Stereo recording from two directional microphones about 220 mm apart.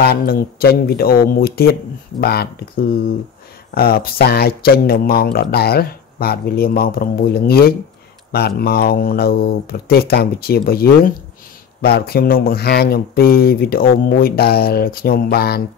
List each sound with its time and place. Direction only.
0.0 s speech: 45° left (ahead or behind)
3.7 s speech: 45° left (ahead or behind)